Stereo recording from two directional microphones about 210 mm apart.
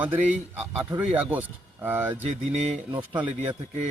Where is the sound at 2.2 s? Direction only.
30° right (ahead or behind).